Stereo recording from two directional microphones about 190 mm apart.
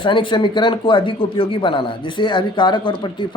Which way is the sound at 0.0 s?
25° left (ahead or behind).